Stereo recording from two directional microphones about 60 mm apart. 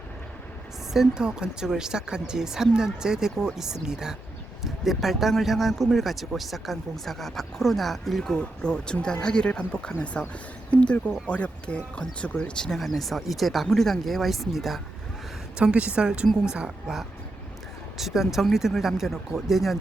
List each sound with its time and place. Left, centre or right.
0.9 s speech: centre
8.4 s speech: centre
15.5 s speech: centre